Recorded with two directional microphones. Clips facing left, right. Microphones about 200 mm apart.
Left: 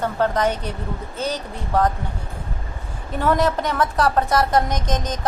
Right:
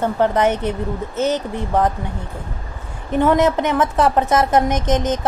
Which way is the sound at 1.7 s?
20° right (ahead or behind).